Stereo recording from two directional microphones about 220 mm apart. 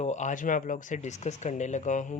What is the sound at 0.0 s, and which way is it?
Speech, 35° left (ahead or behind).